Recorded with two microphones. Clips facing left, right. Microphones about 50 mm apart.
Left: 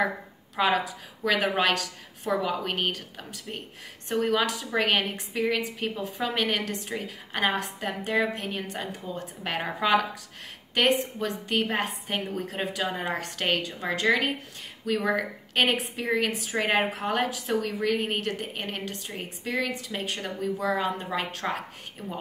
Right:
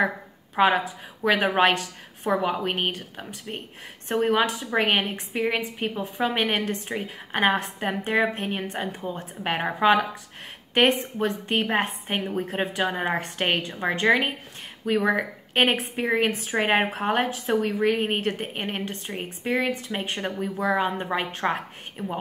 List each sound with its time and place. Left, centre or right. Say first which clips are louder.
0.6 s a woman's voice: right 4 dB; right